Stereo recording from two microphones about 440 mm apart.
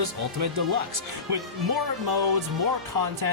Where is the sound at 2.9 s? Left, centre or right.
Right.